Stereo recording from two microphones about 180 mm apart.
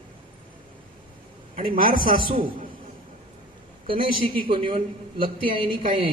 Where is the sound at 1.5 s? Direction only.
50° right (ahead or behind).